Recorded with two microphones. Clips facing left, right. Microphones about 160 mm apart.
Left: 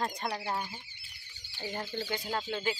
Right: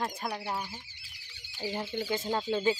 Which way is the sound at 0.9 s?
90° right.